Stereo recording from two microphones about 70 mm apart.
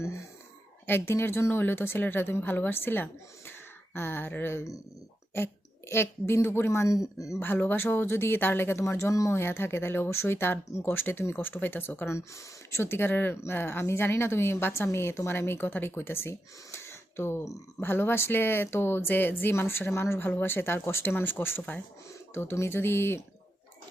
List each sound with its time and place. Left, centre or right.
0.9 s speech: left
5.9 s speech: left
7.3 s speech: left
12.0 s speech: left
16.7 s a sound: left
17.7 s speech: left